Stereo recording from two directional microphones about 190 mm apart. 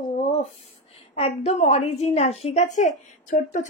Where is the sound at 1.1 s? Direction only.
35° left (ahead or behind).